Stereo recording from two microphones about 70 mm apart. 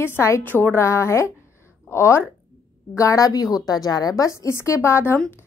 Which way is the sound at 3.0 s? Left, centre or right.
Left.